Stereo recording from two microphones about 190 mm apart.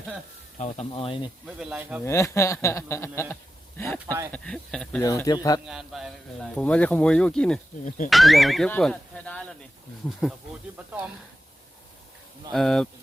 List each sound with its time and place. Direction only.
0.6 s speech: 30° left (ahead or behind)
1.5 s speech: 5° right (ahead or behind)
2.0 s speech: 15° left (ahead or behind)
4.0 s speech: 15° right (ahead or behind)
4.3 s speech: 5° left (ahead or behind)
5.0 s speech: 20° left (ahead or behind)
5.6 s speech: centre (ahead or behind)
12.5 s speech: 5° left (ahead or behind)